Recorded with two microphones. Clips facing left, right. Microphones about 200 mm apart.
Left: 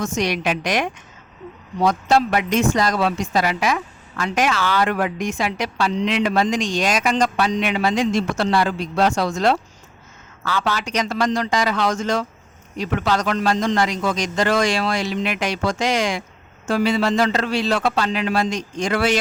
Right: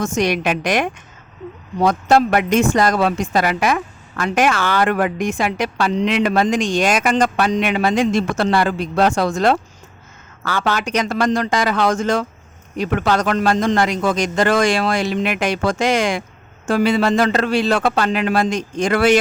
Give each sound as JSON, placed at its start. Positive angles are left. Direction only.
{"t": 0.0, "sound": "a woman's voice", "side_deg": -50}